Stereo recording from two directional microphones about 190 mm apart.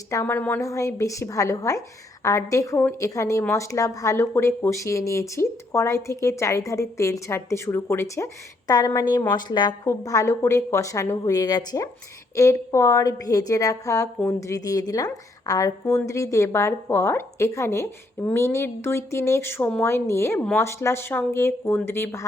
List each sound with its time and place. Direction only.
0.1 s a woman's voice: 15° left (ahead or behind)